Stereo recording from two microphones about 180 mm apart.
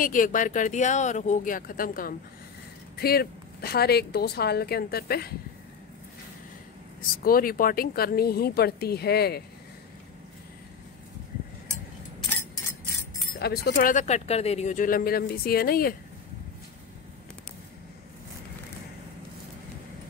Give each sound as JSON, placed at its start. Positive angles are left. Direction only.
{"t": 0.0, "sound": "a woman's voice", "side_deg": 45}
{"t": 7.2, "sound": "a woman's voice", "side_deg": 50}
{"t": 13.4, "sound": "speech", "side_deg": 60}